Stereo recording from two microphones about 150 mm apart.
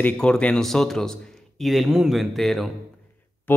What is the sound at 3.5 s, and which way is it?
Speech, 15° left (ahead or behind).